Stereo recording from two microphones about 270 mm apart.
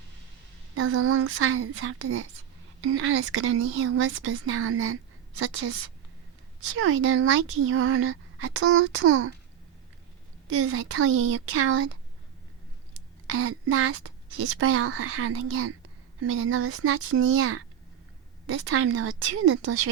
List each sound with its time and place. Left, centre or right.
0.8 s speech: right
10.5 s speech: right
13.2 s speech: right